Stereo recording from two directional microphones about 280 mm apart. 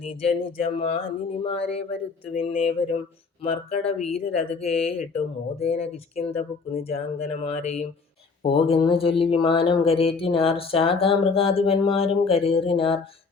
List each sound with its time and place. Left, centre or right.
0.0 s speech: left